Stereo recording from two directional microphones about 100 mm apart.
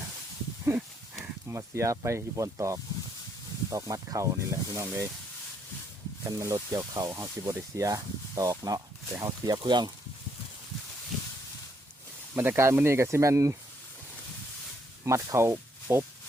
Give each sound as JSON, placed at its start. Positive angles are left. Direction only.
{"t": 1.5, "sound": "speech", "side_deg": -30}
{"t": 6.2, "sound": "speech", "side_deg": -35}
{"t": 9.6, "sound": "speech", "side_deg": -50}
{"t": 12.4, "sound": "speech", "side_deg": -25}
{"t": 15.0, "sound": "speech", "side_deg": -30}